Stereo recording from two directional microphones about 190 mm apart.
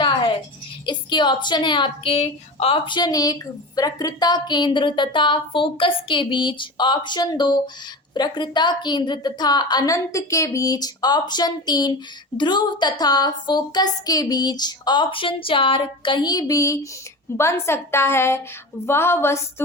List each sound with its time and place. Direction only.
0.9 s a woman's voice: 25° left (ahead or behind)